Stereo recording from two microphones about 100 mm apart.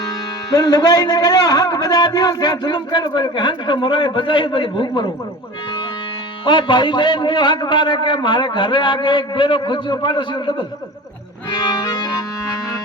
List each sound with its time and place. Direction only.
0.5 s a man's voice: 40° left (ahead or behind)
6.4 s a man's voice: 55° left (ahead or behind)
11.5 s accordion: 40° left (ahead or behind)